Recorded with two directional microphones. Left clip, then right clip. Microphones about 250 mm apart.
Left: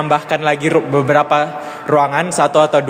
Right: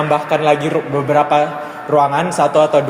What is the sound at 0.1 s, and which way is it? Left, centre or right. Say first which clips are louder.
A man's voice: right 1 dB; left.